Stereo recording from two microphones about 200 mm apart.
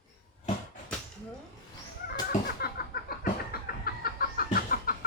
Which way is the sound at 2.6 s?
50° left (ahead or behind).